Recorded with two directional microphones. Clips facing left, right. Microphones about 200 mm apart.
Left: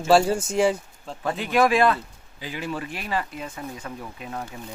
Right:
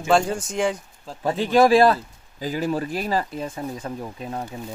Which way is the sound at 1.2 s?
30° right (ahead or behind).